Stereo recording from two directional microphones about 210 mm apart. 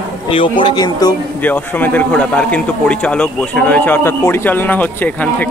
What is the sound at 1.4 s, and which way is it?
A man's voice, 10° left (ahead or behind).